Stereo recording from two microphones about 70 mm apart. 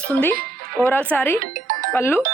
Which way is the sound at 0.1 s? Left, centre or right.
Left.